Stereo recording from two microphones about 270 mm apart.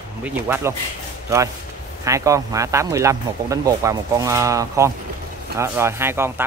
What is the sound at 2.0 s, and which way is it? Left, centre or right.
Speech, centre.